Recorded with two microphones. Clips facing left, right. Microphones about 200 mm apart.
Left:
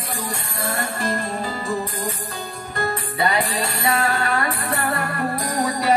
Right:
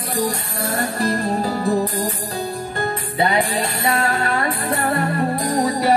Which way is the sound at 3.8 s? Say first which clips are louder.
Even; 25° right (ahead or behind).